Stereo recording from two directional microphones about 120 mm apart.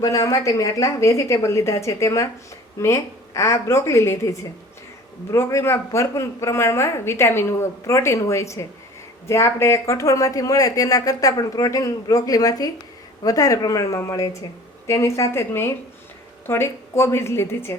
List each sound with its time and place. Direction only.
0.0 s a woman's voice: 30° left (ahead or behind)